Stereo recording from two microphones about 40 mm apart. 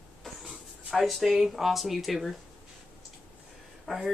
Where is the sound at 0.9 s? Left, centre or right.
Centre.